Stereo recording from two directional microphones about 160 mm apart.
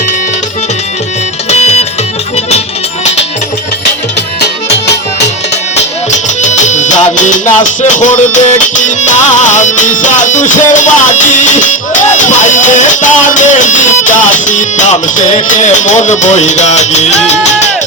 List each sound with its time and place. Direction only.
1.5 s music: 40° left (ahead or behind)
6.1 s music: 50° left (ahead or behind)